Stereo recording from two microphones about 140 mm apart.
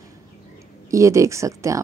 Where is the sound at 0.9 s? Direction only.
20° right (ahead or behind).